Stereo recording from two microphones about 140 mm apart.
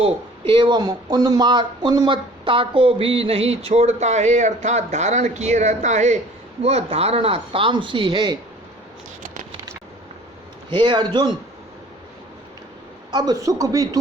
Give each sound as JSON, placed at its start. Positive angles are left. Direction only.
{"t": 0.0, "sound": "speech", "side_deg": -40}
{"t": 6.6, "sound": "speech", "side_deg": -45}
{"t": 9.2, "sound": "a sound", "side_deg": -65}
{"t": 10.8, "sound": "speech", "side_deg": -30}
{"t": 13.1, "sound": "a man's voice", "side_deg": -30}